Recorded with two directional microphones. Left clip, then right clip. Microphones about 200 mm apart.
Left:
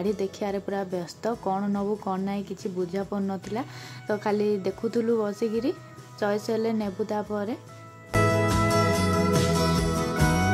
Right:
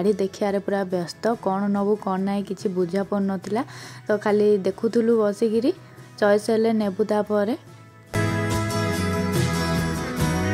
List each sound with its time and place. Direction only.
0.0 s a woman's voice: 20° right (ahead or behind)
8.1 s music: centre (ahead or behind)